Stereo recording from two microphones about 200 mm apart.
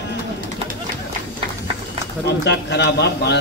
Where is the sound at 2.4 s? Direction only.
60° left (ahead or behind).